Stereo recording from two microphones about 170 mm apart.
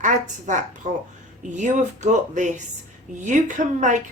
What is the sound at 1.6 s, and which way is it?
A woman's voice, 45° right (ahead or behind).